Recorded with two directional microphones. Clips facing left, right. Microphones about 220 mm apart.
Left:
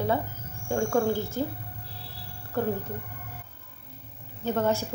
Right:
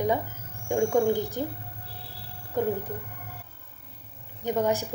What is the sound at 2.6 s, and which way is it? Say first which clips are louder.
Speech: right 1 dB; 15° right (ahead or behind).